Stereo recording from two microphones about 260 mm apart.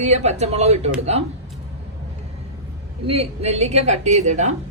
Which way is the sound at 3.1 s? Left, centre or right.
Right.